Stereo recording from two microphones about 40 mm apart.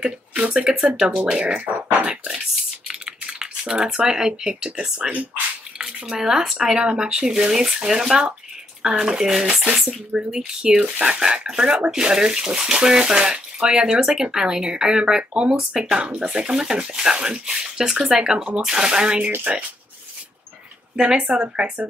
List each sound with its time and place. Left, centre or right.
0.0 s speech: right
2.9 s typing: centre
5.8 s speech: centre
9.8 s speech: centre
10.8 s speech: right
16.4 s speech: centre
20.9 s speech: right
21.3 s speech: right